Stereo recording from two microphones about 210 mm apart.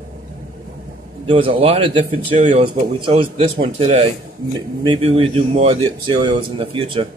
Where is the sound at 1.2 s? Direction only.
25° right (ahead or behind).